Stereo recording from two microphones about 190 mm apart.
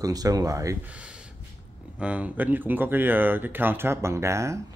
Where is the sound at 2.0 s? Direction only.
5° right (ahead or behind).